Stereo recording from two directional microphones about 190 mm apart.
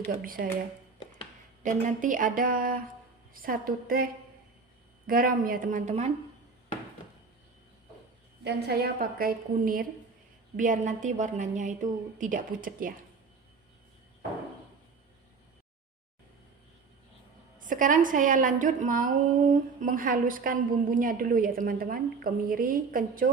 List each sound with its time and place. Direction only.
0.2 s a woman's voice: 50° right (ahead or behind)
1.6 s a woman's voice: 45° right (ahead or behind)
8.4 s a woman's voice: 55° right (ahead or behind)
17.6 s a woman's voice: 45° right (ahead or behind)